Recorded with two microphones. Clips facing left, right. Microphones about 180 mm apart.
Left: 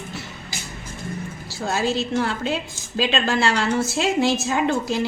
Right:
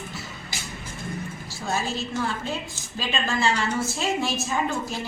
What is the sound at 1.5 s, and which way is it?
A woman's voice, 80° left.